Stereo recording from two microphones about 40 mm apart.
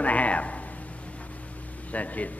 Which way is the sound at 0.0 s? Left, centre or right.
Left.